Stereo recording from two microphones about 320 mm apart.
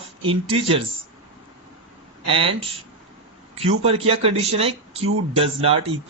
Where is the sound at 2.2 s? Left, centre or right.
Centre.